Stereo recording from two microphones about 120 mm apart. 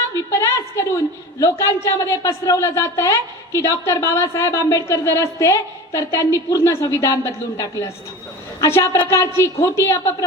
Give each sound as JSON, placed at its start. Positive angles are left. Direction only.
{"t": 0.3, "sound": "a woman's voice", "side_deg": 25}